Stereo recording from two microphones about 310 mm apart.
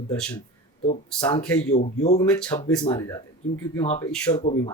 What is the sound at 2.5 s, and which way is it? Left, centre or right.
A man's voice, centre.